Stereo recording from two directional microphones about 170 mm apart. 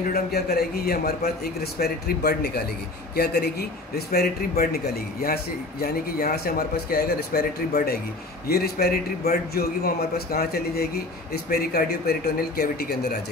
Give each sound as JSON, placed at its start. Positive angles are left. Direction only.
{"t": 0.1, "sound": "a man's voice", "side_deg": 65}